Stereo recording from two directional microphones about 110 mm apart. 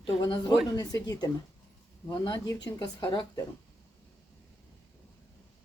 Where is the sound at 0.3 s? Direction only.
40° left (ahead or behind).